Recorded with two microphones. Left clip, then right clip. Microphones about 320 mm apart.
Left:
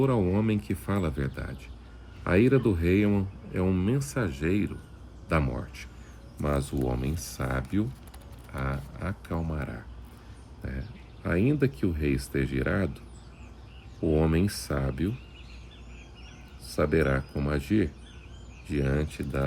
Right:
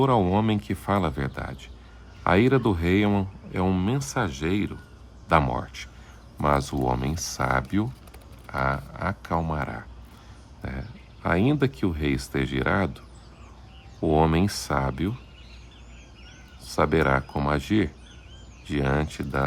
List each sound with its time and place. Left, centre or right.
0.0 s speech: centre
14.1 s speech: centre
16.7 s speech: centre